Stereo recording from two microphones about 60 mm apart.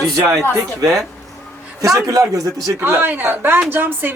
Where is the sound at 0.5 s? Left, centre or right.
Right.